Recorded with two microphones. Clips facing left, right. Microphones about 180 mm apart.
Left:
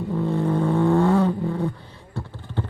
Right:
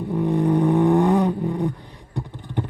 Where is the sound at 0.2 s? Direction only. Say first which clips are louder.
Right 4 dB; 15° right (ahead or behind).